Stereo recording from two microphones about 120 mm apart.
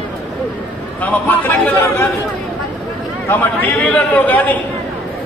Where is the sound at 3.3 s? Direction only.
15° left (ahead or behind).